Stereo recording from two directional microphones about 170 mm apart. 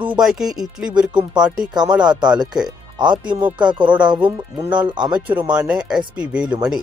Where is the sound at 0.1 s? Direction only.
5° right (ahead or behind).